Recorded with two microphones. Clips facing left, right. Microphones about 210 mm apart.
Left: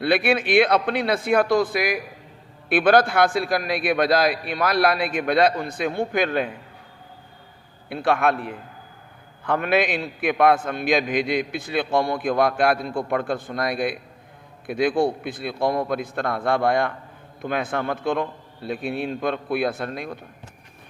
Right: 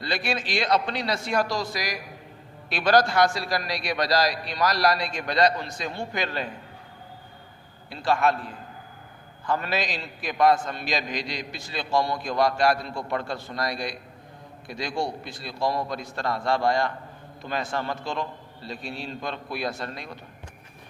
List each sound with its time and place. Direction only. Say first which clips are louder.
0.0 s a man's voice: left 9 dB; 60° left (ahead or behind)
7.9 s a man's voice: left 3 dB; 60° left (ahead or behind)